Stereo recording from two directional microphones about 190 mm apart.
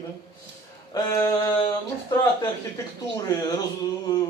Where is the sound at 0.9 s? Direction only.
15° left (ahead or behind).